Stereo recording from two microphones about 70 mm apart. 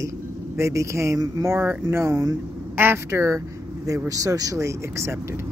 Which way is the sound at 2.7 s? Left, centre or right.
Right.